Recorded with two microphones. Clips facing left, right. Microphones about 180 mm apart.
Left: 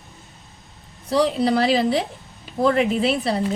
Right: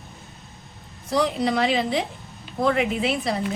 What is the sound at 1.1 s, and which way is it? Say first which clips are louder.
Speech: left 3 dB; 30° left (ahead or behind).